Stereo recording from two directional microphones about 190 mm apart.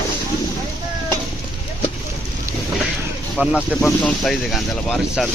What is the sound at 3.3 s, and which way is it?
Speech, 5° right (ahead or behind).